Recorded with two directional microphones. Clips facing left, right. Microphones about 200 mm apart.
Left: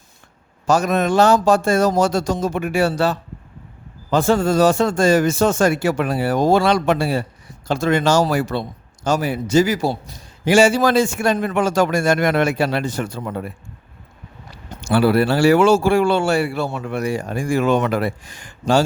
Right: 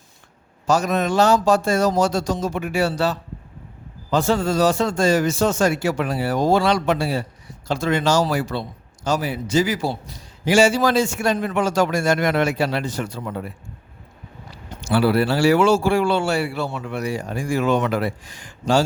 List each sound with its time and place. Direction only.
0.7 s a man's voice: 55° left (ahead or behind)
14.8 s a man's voice: 55° left (ahead or behind)